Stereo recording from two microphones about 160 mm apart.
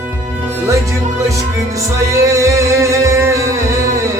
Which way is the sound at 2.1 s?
20° right (ahead or behind).